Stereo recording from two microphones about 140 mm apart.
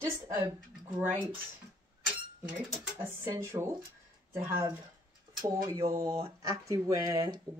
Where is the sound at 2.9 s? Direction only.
20° right (ahead or behind).